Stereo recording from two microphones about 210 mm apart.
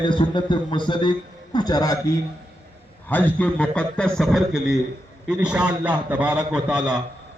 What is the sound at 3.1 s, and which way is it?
A man's voice, 5° left (ahead or behind).